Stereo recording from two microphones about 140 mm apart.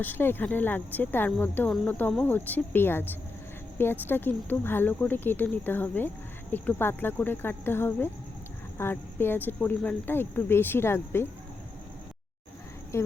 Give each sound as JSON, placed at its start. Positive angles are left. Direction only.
{"t": 0.0, "sound": "speech", "side_deg": 15}
{"t": 12.9, "sound": "a woman's voice", "side_deg": 20}